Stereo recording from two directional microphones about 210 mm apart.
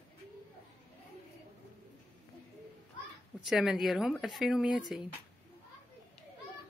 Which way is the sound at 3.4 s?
Centre (ahead or behind).